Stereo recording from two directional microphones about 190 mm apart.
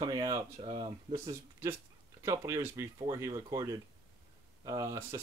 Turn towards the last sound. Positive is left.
turn(degrees=-20)  # may be behind; listen again after turning